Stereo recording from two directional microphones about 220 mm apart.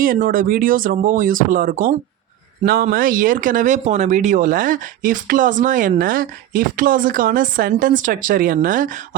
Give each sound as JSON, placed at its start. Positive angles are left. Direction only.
{"t": 0.0, "sound": "speech", "side_deg": -40}